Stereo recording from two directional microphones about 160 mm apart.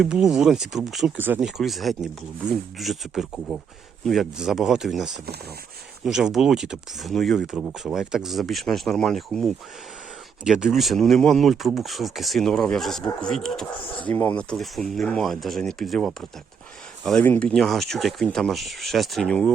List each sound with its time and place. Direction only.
0.0 s speech: 5° right (ahead or behind)